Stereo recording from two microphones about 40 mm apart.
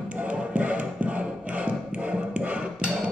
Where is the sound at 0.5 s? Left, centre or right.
Right.